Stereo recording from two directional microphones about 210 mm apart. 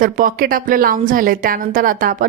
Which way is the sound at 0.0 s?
40° right (ahead or behind).